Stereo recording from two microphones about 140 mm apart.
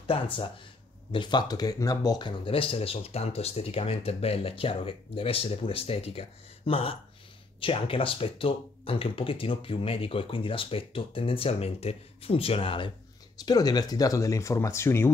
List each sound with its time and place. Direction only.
0.0 s speech: 40° left (ahead or behind)
13.5 s speech: 30° left (ahead or behind)